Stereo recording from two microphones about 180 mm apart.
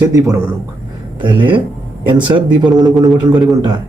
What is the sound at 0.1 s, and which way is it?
Speech, 20° right (ahead or behind).